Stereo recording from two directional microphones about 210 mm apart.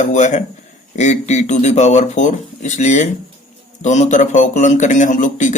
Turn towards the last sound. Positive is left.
turn(degrees=35)  # may be behind; listen again after turning